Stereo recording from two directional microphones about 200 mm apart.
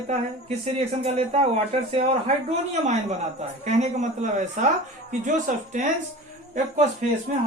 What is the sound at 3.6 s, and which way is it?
Speech, 35° right (ahead or behind).